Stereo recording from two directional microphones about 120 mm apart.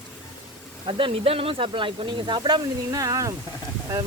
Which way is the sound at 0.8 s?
50° right (ahead or behind).